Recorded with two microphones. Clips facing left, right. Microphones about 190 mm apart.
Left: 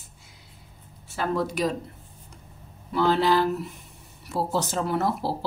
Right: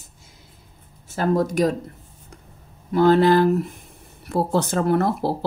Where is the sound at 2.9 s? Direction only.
50° right (ahead or behind).